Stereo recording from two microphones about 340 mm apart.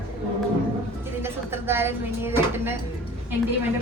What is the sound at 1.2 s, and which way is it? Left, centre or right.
A woman's voice, centre.